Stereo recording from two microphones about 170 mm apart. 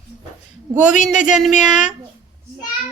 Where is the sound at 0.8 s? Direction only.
45° left (ahead or behind).